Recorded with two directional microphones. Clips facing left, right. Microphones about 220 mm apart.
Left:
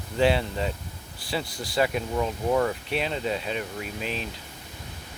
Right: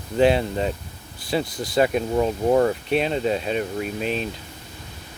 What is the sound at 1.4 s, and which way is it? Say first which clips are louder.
Speech: right 6 dB; 20° right (ahead or behind).